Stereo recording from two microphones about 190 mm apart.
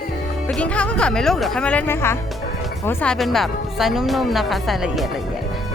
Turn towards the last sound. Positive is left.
turn(degrees=0)  # may be behind; listen again after turning